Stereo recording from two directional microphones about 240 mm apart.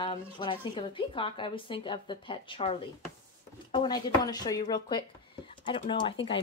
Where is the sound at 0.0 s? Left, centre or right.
Left.